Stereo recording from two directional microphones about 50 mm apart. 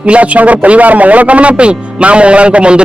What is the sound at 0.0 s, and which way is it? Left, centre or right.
A man's voice, right.